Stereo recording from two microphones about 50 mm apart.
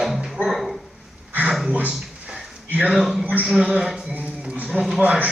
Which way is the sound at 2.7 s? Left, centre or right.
Right.